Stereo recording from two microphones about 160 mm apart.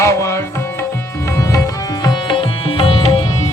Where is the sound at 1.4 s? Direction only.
20° left (ahead or behind).